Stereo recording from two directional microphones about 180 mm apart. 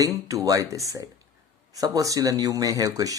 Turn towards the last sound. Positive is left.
turn(degrees=-20)  # may be behind; listen again after turning